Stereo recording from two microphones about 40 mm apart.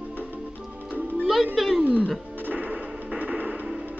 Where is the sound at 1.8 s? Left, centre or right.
Right.